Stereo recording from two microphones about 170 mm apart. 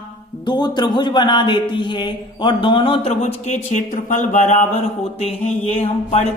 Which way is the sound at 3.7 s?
45° left (ahead or behind).